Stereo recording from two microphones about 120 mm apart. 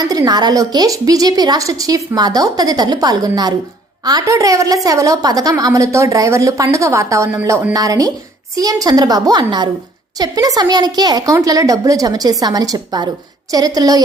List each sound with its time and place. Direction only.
0.0 s a woman's voice: 30° right (ahead or behind)